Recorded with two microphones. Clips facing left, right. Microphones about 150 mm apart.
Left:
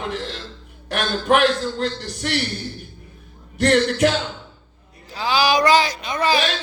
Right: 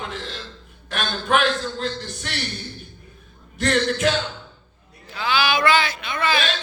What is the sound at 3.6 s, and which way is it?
Speech, 60° left (ahead or behind).